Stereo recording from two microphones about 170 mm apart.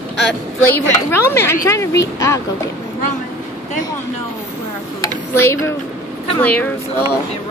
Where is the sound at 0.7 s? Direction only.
15° left (ahead or behind).